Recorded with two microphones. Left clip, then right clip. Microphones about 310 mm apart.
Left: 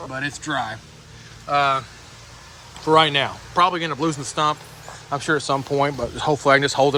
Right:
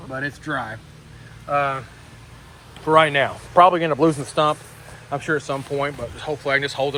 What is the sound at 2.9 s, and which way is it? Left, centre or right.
A man's voice, centre.